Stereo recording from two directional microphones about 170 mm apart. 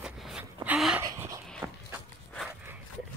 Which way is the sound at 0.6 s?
5° right (ahead or behind).